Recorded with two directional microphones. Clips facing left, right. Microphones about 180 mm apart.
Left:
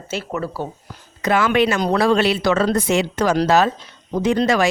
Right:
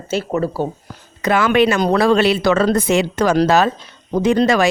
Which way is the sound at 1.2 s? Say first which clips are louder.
Right 3 dB; 70° right (ahead or behind).